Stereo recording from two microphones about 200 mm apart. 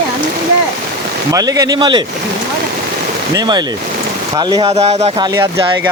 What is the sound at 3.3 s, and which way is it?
Speech, 20° right (ahead or behind).